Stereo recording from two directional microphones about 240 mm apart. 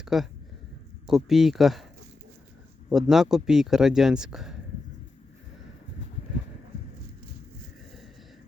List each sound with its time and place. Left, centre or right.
0.0 s speech: centre
2.9 s speech: centre